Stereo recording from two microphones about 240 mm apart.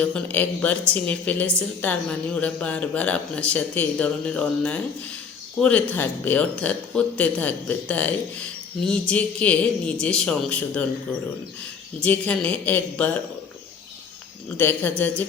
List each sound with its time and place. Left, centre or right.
0.0 s speech: centre
11.9 s speech: centre
14.6 s speech: centre